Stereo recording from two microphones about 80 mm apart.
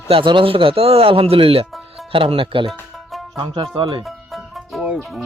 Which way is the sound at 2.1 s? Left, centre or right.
Right.